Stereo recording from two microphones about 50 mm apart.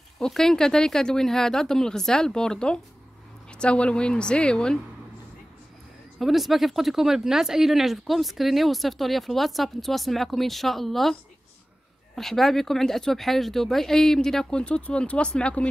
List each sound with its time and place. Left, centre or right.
0.2 s a woman's voice: centre
6.1 s speech: centre
12.2 s speech: centre; by 15.6 s left